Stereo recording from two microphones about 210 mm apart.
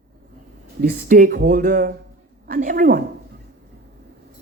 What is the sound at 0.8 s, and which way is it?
Speech, 45° right (ahead or behind).